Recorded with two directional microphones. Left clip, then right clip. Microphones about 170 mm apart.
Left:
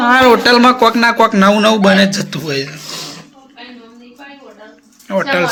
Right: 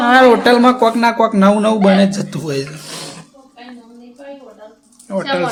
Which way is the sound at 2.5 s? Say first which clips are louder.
Left 2 dB; 25° right (ahead or behind).